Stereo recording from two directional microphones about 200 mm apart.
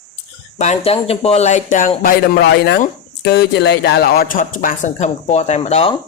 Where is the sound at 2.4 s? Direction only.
55° left (ahead or behind).